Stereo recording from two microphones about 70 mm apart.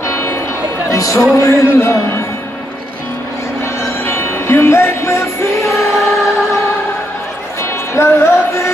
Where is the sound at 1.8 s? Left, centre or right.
Left.